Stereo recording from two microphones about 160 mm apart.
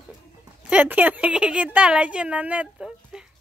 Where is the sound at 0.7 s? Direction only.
10° right (ahead or behind).